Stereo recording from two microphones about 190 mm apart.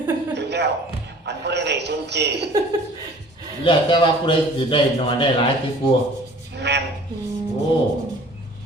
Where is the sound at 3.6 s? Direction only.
25° left (ahead or behind).